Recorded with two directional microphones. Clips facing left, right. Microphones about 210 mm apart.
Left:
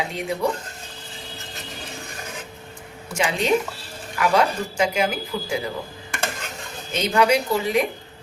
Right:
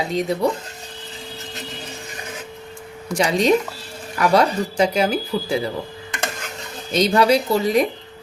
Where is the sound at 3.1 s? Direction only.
40° right (ahead or behind).